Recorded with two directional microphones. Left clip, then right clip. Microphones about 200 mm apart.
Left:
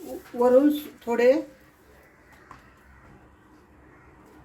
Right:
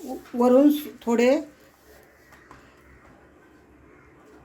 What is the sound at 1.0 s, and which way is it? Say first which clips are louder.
Speech: even; 45° right (ahead or behind).